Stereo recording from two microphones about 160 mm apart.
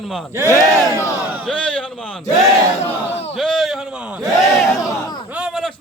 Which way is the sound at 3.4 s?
Centre (ahead or behind).